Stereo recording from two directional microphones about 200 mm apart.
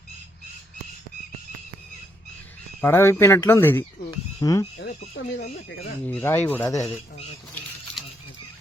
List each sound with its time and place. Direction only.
2.8 s speech: 10° left (ahead or behind)
5.4 s speech: 55° left (ahead or behind)
6.1 s speech: 10° left (ahead or behind)